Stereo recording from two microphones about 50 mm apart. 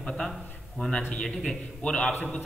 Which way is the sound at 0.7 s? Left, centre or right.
Centre.